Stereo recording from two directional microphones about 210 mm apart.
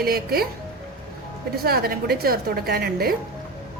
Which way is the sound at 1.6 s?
45° right (ahead or behind).